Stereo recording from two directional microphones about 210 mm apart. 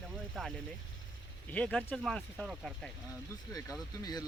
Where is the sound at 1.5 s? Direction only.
5° left (ahead or behind).